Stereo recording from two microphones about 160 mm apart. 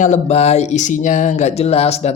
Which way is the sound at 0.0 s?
45° left (ahead or behind).